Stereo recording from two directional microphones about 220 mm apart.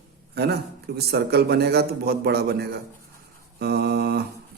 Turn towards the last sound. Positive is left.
turn(degrees=-45)  # may be behind; listen again after turning